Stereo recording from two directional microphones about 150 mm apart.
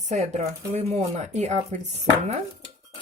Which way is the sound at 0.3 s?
45° right (ahead or behind).